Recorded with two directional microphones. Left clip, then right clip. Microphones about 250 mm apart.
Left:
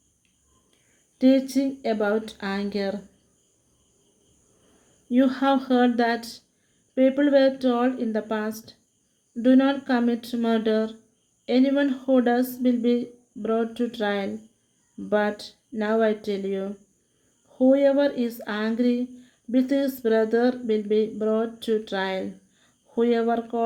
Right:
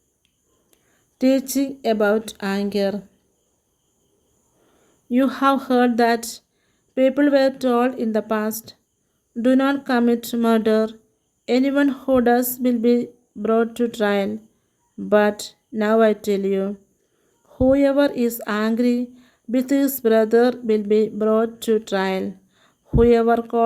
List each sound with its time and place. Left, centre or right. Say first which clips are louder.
1.2 s speech: right 1 dB; right
5.0 s speech: right 3 dB; right